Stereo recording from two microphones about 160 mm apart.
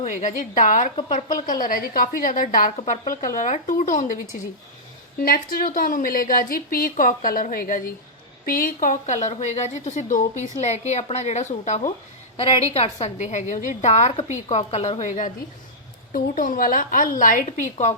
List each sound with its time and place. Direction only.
0.0 s a woman's voice: 50° left (ahead or behind)
5.2 s a woman's voice: 65° left (ahead or behind); by 17.9 s 45° left (ahead or behind)